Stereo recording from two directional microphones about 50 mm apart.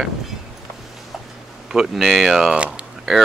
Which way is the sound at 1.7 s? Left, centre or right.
Centre.